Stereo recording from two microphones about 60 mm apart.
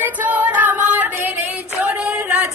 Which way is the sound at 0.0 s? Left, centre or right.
Right.